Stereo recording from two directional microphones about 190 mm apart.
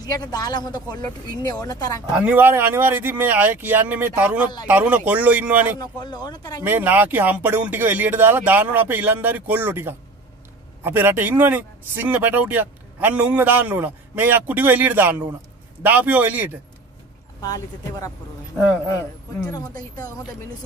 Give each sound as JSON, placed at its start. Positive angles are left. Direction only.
{"t": 0.0, "sound": "speech", "side_deg": 20}
{"t": 2.1, "sound": "speech", "side_deg": -10}
{"t": 5.8, "sound": "speech", "side_deg": 20}
{"t": 6.6, "sound": "speech", "side_deg": -10}